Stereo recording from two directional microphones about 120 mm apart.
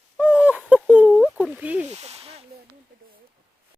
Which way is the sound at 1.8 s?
65° right (ahead or behind).